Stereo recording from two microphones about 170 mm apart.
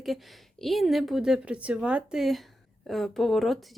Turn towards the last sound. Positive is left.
turn(degrees=0)  # may be behind; listen again after turning